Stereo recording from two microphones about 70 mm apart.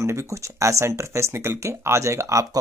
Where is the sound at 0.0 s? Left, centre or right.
Right.